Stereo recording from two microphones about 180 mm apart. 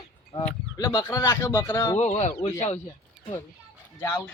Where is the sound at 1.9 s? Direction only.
40° left (ahead or behind).